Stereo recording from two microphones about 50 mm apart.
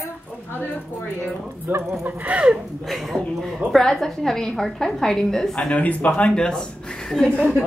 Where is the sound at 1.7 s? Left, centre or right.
Right.